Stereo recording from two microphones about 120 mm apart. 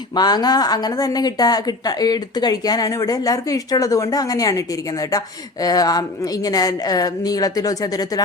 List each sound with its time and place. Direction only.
0.1 s a woman's voice: 35° left (ahead or behind)